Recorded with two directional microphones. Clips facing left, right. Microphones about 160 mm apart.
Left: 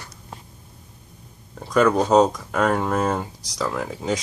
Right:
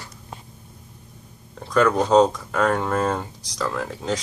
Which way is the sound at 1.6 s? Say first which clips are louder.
Left 1 dB; 10° left (ahead or behind).